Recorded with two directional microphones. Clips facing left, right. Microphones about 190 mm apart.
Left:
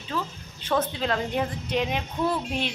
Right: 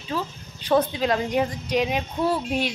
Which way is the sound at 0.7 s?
15° right (ahead or behind).